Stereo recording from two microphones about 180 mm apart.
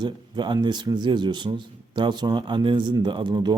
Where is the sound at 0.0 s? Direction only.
25° right (ahead or behind).